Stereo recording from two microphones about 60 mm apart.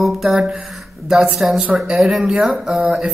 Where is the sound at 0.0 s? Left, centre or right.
Centre.